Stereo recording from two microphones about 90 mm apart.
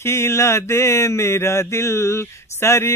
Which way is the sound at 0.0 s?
30° left (ahead or behind).